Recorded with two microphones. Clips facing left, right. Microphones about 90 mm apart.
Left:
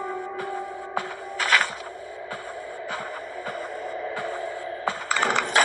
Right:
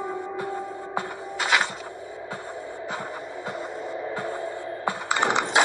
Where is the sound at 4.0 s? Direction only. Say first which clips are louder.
Even; 20° right (ahead or behind).